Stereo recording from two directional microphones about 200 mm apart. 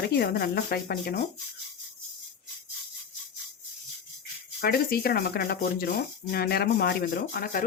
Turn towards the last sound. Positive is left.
turn(degrees=45)  # may be behind; listen again after turning